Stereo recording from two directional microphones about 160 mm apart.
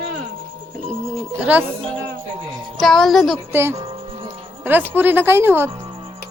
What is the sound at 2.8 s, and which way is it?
Speech, centre (ahead or behind).